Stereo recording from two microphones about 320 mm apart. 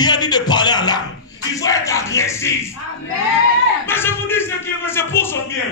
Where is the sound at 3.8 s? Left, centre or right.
Centre.